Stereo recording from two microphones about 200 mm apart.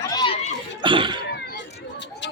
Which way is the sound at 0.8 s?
25° right (ahead or behind).